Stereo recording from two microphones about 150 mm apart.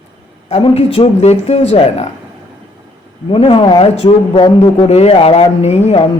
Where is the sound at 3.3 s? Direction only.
35° left (ahead or behind).